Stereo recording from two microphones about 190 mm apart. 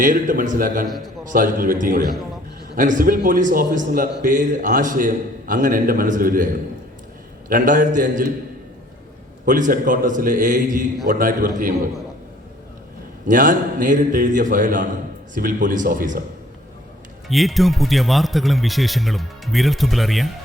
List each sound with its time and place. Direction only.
0.0 s a man's voice: 45° right (ahead or behind)
0.9 s speech: centre (ahead or behind)
1.2 s a man's voice: 45° right (ahead or behind)
7.5 s a man's voice: 45° right (ahead or behind)
9.5 s a man's voice: 45° right (ahead or behind)
13.2 s a man's voice: 45° right (ahead or behind)
17.2 s speech: centre (ahead or behind)